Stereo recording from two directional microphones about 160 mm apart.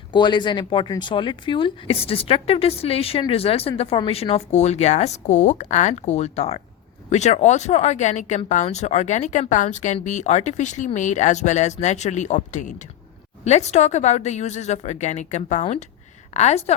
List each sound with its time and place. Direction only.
0.1 s speech: 30° left (ahead or behind)